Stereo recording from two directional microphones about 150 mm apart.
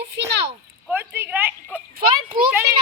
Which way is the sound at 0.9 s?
15° right (ahead or behind).